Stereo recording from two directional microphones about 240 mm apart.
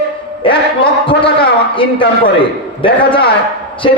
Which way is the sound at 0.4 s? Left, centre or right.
Left.